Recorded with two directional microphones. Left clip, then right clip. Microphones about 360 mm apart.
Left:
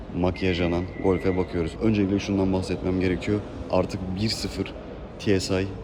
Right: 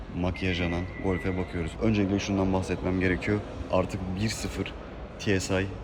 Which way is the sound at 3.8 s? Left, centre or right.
Left.